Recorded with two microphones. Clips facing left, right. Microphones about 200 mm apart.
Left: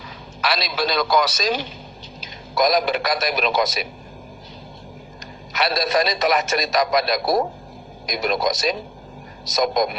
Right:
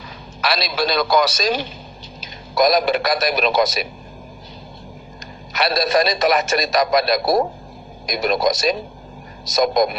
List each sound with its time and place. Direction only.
0.5 s a man's voice: 40° right (ahead or behind)
2.6 s a man's voice: 40° right (ahead or behind)
5.6 s a man's voice: 40° right (ahead or behind)